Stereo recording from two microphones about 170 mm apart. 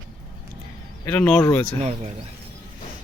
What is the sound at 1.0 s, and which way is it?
Speech, 10° left (ahead or behind).